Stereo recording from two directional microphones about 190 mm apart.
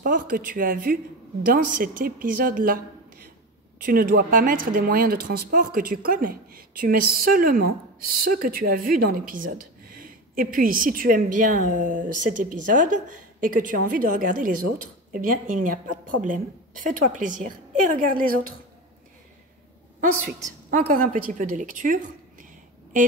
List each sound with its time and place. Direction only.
0.0 s speech: 45° right (ahead or behind)
3.8 s speech: 50° right (ahead or behind)
20.0 s speech: 45° right (ahead or behind)